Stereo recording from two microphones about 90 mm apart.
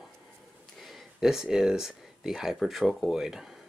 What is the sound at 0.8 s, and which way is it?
Speech, centre (ahead or behind).